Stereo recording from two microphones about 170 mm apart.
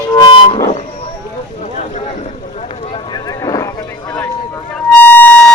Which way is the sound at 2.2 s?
40° left (ahead or behind).